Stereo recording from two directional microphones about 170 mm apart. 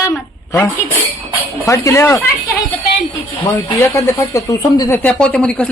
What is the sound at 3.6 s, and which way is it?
Speech, 15° left (ahead or behind).